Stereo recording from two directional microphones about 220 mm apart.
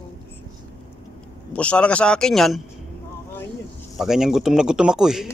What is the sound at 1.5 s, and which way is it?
Speech, 5° left (ahead or behind).